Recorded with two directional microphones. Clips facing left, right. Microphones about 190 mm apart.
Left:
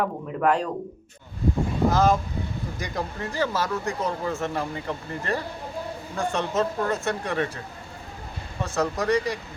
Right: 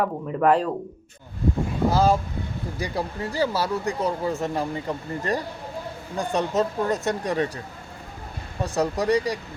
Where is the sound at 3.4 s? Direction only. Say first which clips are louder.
Right 2 dB; 10° right (ahead or behind).